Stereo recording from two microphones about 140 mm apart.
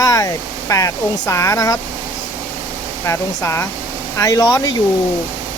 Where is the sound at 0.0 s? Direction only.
25° left (ahead or behind).